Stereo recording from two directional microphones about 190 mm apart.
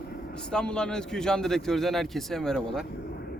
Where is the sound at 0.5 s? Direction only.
5° left (ahead or behind).